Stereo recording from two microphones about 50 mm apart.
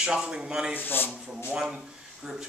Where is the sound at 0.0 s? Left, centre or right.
Centre.